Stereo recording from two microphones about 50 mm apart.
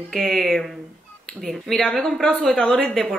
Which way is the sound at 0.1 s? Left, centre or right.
Centre.